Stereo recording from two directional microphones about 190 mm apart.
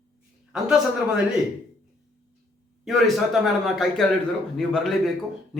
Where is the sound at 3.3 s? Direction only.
Centre (ahead or behind).